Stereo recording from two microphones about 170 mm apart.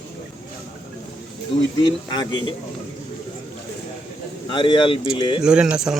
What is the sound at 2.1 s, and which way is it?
Speech, 25° left (ahead or behind).